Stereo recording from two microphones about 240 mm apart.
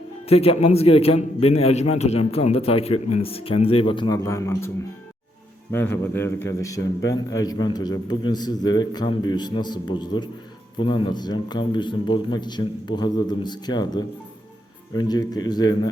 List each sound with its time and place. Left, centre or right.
0.3 s a man's voice: left
5.7 s a man's voice: centre